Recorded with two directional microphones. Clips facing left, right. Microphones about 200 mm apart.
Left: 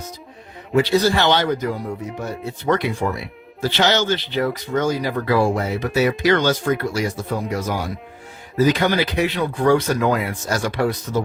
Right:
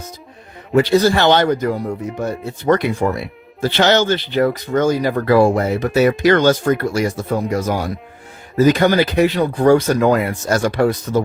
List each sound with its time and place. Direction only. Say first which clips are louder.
0.8 s speech: right 4 dB; 50° right (ahead or behind)